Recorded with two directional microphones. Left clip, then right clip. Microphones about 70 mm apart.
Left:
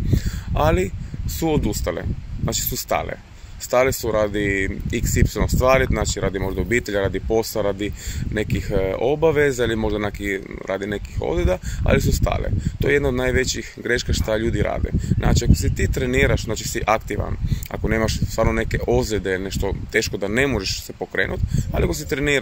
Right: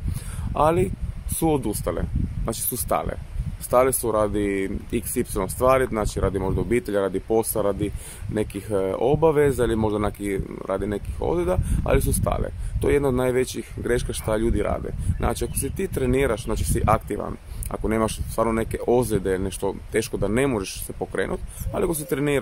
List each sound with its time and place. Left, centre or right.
0.6 s speech: right
1.9 s speech: centre
2.5 s speech: right
7.2 s speech: right
16.8 s speech: centre